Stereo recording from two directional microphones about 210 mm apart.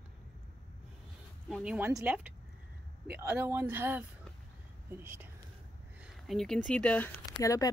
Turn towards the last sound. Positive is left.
turn(degrees=15)  # may be behind; listen again after turning